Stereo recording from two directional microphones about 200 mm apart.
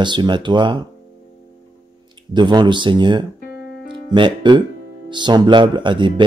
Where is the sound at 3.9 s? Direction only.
25° right (ahead or behind).